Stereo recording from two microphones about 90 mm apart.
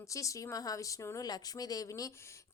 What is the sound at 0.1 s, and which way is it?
A woman's voice, 35° left (ahead or behind).